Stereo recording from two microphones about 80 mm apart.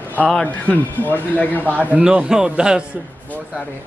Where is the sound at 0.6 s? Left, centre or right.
Left.